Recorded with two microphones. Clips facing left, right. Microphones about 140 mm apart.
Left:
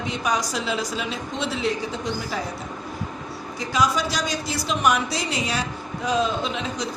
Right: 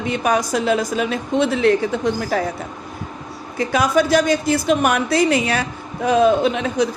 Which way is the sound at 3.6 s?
55° right (ahead or behind).